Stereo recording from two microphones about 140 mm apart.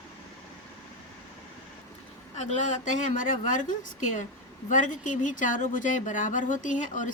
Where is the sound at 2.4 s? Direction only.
60° left (ahead or behind).